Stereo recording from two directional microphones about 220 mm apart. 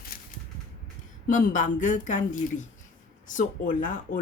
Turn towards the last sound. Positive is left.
turn(degrees=35)  # may be behind; listen again after turning